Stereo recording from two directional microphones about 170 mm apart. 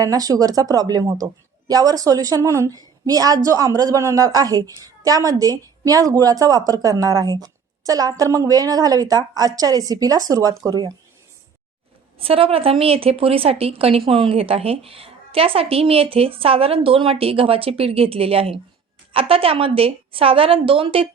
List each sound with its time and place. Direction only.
0.0 s speech: 20° right (ahead or behind)
12.2 s a woman's voice: 35° right (ahead or behind)